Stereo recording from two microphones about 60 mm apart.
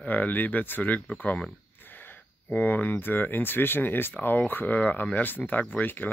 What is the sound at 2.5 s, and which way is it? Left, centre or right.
Speech, left.